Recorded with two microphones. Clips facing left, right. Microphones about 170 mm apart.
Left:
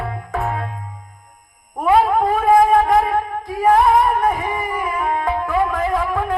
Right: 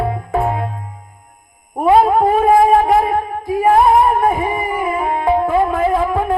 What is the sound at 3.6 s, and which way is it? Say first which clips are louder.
Music: right 2 dB; 25° right (ahead or behind).